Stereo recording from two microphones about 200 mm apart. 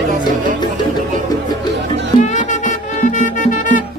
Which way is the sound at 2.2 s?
40° left (ahead or behind).